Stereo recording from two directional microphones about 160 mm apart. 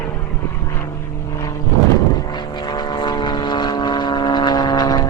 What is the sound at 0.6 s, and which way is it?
Vehicle, 15° left (ahead or behind).